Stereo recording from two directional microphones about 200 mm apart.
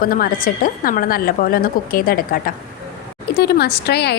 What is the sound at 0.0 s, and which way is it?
A woman's voice, 45° left (ahead or behind).